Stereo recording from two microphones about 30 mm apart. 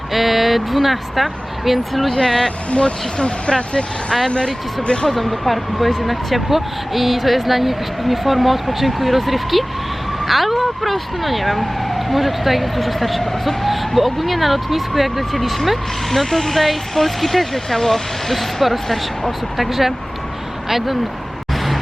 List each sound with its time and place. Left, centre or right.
0.1 s speech: centre
2.1 s speech: centre
2.6 s speech: left
5.0 s speech: centre